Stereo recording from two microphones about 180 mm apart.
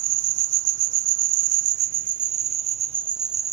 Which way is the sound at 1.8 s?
55° right (ahead or behind).